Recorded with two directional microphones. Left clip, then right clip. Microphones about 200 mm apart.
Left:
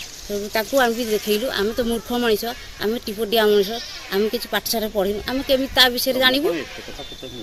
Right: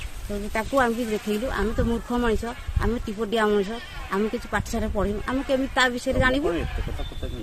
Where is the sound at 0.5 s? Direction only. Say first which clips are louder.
Left 4 dB; centre (ahead or behind).